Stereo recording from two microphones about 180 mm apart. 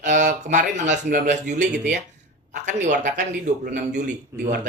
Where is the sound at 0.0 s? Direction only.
45° right (ahead or behind).